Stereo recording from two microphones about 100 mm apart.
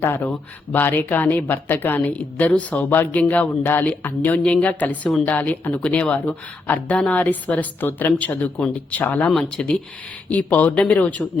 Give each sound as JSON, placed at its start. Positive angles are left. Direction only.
{"t": 0.0, "sound": "speech", "side_deg": 20}